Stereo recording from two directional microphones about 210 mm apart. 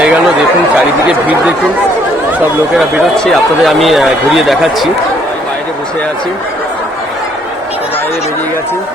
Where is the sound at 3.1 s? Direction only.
Centre (ahead or behind).